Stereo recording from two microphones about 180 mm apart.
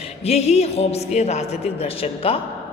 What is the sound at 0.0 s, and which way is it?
A man's voice, 35° left (ahead or behind).